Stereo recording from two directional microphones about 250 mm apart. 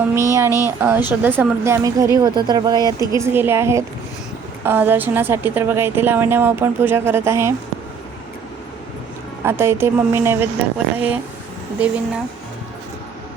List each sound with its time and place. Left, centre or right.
0.0 s a woman's voice: centre
9.4 s a woman's voice: centre